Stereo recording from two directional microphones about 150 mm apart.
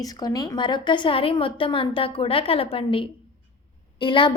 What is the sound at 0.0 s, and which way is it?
A woman's voice, 25° left (ahead or behind).